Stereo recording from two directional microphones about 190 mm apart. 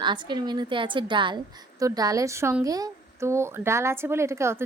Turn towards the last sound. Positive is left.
turn(degrees=-15)  # may be behind; listen again after turning